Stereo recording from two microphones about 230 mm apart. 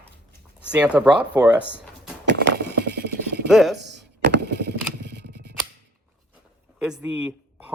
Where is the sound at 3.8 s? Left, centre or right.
Right.